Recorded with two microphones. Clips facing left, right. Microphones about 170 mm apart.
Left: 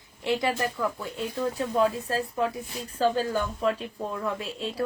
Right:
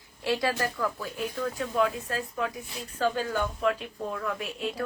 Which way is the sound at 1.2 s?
30° left (ahead or behind).